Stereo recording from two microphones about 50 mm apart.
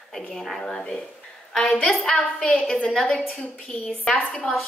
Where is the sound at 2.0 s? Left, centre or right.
Left.